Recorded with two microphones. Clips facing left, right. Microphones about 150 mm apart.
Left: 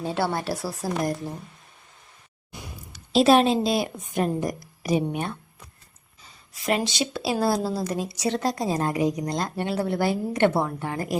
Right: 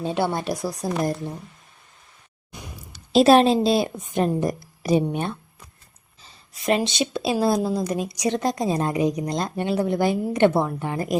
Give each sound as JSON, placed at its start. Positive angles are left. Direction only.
{"t": 0.0, "sound": "a woman's voice", "side_deg": -20}
{"t": 2.5, "sound": "a sound", "side_deg": -20}
{"t": 3.1, "sound": "a woman's voice", "side_deg": -40}